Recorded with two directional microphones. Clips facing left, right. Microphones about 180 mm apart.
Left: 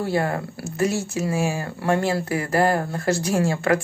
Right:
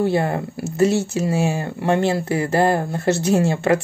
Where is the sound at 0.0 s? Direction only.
25° right (ahead or behind).